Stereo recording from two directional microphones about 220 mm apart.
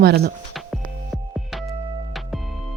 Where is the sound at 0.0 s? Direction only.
45° right (ahead or behind).